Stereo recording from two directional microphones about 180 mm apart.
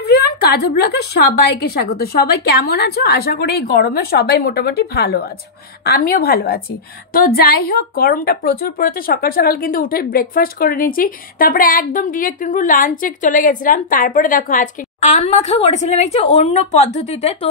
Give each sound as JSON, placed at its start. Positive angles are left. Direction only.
{"t": 0.1, "sound": "a woman's voice", "side_deg": 65}
{"t": 7.6, "sound": "a woman's voice", "side_deg": 55}